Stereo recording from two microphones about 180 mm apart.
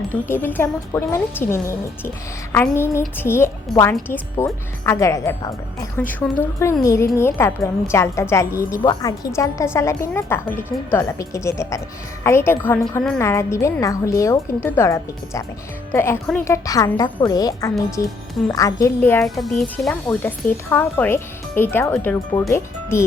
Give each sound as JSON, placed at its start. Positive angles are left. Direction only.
{"t": 0.1, "sound": "a woman's voice", "side_deg": 10}
{"t": 19.4, "sound": "a woman's voice", "side_deg": 0}